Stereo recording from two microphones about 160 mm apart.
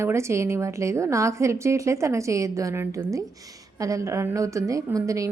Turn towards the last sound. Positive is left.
turn(degrees=-20)  # may be behind; listen again after turning